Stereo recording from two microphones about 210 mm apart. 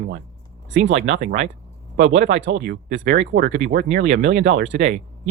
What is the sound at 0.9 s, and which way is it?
Speech, 35° right (ahead or behind).